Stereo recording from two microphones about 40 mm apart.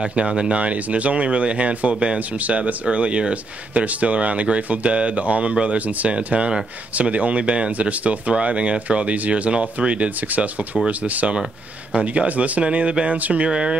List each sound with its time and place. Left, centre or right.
0.0 s speech: right
0.6 s speech: right